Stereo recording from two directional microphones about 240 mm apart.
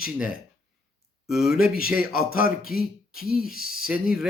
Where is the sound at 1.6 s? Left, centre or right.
Left.